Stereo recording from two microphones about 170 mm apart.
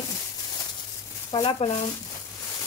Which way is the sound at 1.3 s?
30° left (ahead or behind).